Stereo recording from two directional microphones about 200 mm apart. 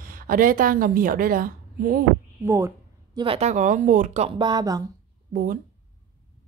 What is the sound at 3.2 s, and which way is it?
Speech, 30° right (ahead or behind).